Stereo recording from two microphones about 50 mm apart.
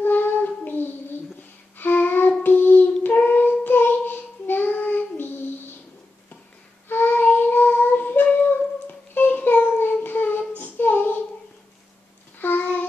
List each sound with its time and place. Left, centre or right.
0.0 s child singing: left
6.9 s child singing: left
12.4 s a sound: left